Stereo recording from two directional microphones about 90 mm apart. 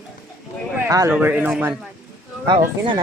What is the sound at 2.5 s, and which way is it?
Speech, 65° right (ahead or behind).